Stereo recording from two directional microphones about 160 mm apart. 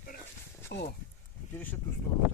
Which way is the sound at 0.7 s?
90° left.